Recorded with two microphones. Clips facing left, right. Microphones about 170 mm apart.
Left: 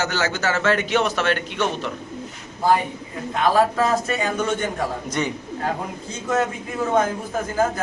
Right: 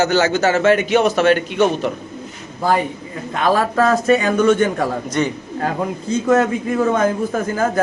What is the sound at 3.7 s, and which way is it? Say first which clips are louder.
Speech: right 7 dB; 70° right (ahead or behind).